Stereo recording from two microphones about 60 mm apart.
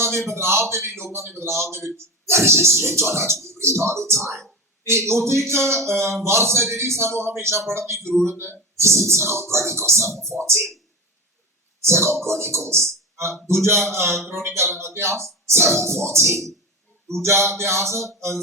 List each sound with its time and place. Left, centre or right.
0.0 s speech: right
11.9 s speech: right